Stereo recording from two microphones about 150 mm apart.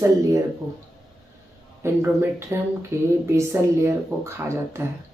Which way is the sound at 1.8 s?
20° right (ahead or behind).